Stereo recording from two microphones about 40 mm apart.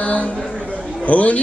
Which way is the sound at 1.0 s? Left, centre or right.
Left.